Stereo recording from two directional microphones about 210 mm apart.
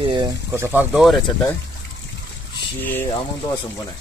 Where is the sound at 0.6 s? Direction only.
10° right (ahead or behind).